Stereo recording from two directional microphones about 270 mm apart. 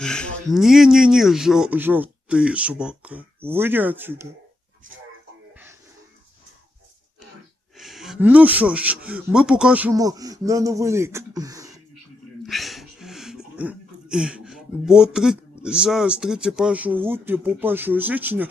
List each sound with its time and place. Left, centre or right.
0.0 s a man's voice: centre
7.8 s speech: centre
12.5 s speech: centre